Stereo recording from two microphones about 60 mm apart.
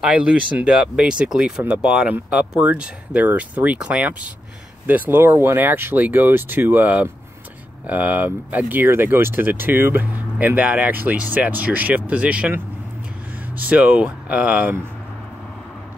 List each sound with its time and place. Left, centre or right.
0.0 s speech: centre
5.2 s speech: right
13.6 s speech: right